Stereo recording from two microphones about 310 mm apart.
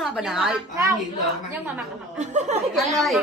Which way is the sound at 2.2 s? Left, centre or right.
Right.